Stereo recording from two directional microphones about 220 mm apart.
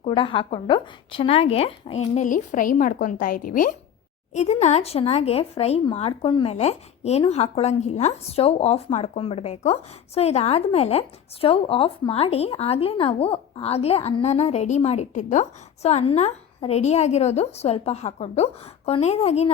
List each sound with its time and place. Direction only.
0.0 s speech: 25° left (ahead or behind)